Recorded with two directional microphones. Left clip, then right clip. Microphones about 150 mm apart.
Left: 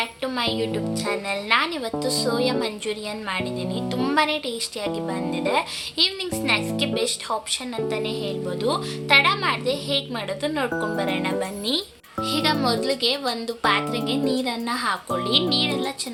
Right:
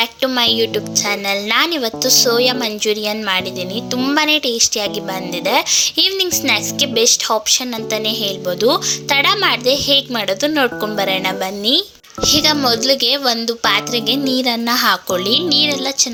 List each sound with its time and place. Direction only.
0.0 s a woman's voice: 50° right (ahead or behind)
12.2 s a woman's voice: 45° right (ahead or behind)